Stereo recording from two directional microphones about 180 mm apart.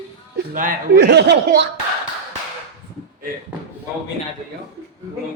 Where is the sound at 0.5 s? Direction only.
50° right (ahead or behind).